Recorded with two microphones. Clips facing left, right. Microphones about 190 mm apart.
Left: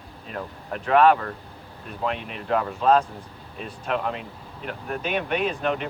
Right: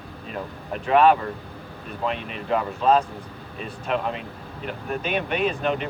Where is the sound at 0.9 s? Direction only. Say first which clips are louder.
Even; centre (ahead or behind).